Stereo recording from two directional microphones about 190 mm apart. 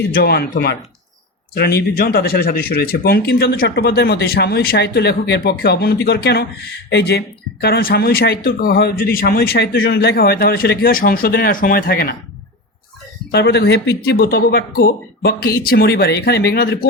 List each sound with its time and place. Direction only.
0.1 s speech: 55° left (ahead or behind)
13.3 s speech: 60° left (ahead or behind)